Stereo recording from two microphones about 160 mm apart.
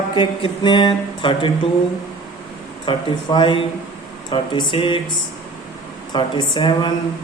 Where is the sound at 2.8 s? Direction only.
30° left (ahead or behind).